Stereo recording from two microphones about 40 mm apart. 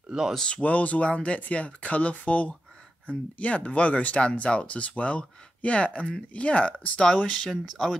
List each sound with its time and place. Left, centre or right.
0.5 s speech: left
7.4 s speech: centre